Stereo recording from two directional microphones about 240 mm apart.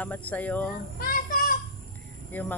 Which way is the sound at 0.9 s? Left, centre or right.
Left.